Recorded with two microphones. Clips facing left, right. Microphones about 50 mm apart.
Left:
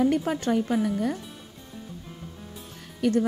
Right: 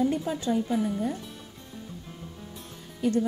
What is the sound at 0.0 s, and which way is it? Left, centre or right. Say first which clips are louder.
Speech: left 3 dB; left.